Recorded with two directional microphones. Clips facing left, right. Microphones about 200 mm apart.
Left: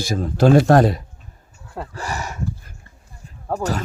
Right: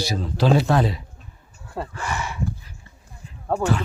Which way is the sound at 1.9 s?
40° left (ahead or behind).